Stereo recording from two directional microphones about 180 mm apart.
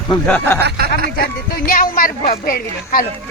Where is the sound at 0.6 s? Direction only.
65° right (ahead or behind).